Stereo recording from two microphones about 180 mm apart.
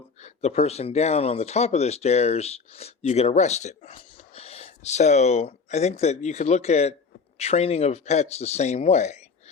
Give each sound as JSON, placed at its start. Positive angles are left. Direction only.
{"t": 0.2, "sound": "speech", "side_deg": 35}